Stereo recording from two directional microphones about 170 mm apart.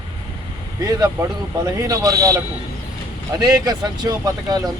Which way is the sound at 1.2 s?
20° right (ahead or behind).